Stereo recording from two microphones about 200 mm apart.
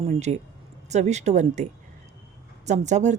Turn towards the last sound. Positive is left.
turn(degrees=-35)  # may be behind; listen again after turning